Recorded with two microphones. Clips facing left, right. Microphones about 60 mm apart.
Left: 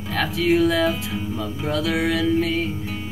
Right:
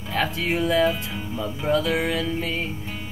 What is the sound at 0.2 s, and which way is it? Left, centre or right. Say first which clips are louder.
Speech: left 5 dB; right.